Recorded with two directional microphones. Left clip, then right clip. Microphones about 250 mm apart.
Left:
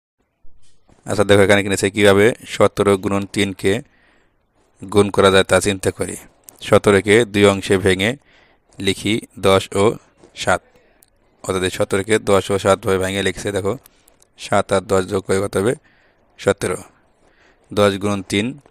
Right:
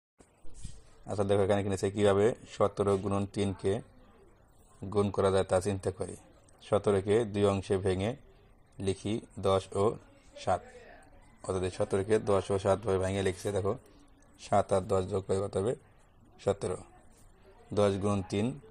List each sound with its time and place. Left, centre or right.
1.0 s speech: left
4.9 s speech: left